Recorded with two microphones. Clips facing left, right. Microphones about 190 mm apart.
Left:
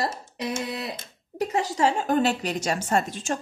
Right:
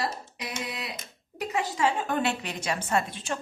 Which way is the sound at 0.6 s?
40° left (ahead or behind).